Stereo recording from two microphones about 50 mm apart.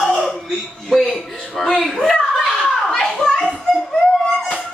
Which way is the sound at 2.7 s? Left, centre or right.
Centre.